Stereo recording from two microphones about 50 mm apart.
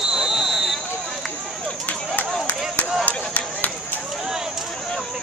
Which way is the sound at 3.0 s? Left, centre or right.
Left.